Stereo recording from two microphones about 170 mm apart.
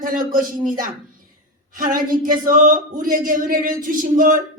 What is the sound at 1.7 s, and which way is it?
Speech, 55° right (ahead or behind).